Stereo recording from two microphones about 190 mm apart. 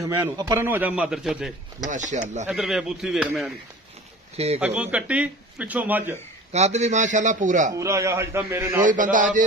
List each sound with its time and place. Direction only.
0.0 s speech: 20° right (ahead or behind); by 1.5 s 5° right (ahead or behind)
1.9 s a man's voice: 40° right (ahead or behind)
2.5 s speech: centre (ahead or behind)
4.6 s speech: 5° right (ahead or behind)
6.5 s a man's voice: 35° right (ahead or behind)
7.7 s speech: 15° right (ahead or behind)
8.8 s a man's voice: 45° right (ahead or behind)